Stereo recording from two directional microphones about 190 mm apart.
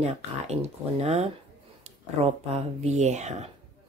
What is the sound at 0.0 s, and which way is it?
Speech, 35° right (ahead or behind).